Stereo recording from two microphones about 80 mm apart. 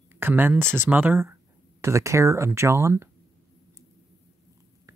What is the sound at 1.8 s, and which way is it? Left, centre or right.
Speech, right.